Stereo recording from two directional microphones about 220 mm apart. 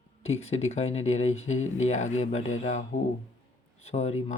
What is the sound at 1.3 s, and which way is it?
Speech, 65° left (ahead or behind).